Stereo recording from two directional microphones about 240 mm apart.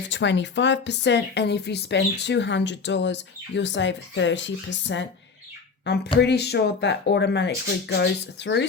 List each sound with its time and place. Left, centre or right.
0.1 s speech: left